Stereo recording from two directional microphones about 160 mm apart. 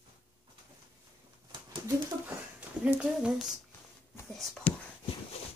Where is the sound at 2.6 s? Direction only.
10° right (ahead or behind).